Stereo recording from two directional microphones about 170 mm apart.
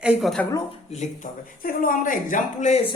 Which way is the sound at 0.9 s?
45° left (ahead or behind).